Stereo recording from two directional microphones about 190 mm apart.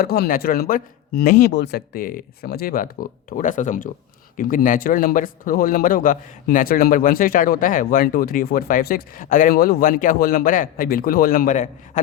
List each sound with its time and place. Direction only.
0.0 s a man's voice: 50° left (ahead or behind)